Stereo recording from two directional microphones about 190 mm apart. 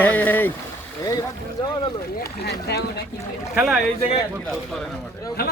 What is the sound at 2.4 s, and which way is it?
Speech, 60° left (ahead or behind).